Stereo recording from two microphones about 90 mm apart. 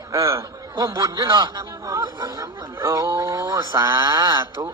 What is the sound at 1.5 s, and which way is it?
Speech, 35° right (ahead or behind).